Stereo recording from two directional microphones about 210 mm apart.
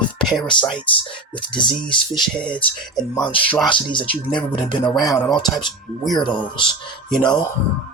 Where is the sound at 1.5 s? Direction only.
20° left (ahead or behind).